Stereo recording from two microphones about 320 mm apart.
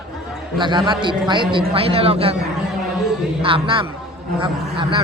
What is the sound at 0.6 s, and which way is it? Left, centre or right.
A man's voice, centre.